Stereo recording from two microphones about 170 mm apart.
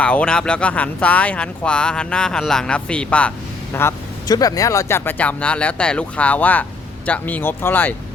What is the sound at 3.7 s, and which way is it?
Speech, 20° left (ahead or behind).